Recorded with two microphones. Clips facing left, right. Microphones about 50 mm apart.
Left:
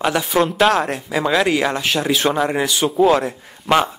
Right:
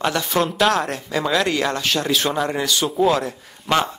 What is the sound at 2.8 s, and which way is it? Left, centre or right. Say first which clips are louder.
Speech: left 4 dB; centre.